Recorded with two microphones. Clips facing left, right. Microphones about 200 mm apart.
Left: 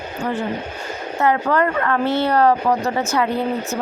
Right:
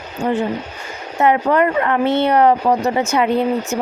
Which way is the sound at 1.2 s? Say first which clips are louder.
Right 3 dB; 20° right (ahead or behind).